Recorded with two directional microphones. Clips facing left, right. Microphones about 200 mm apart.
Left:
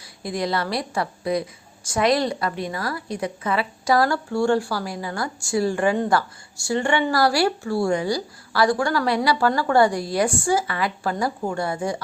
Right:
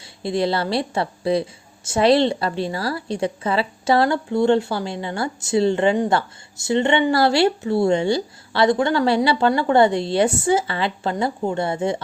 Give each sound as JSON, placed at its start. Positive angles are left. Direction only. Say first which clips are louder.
{"t": 0.0, "sound": "a woman's voice", "louder": "right 5 dB", "side_deg": -25}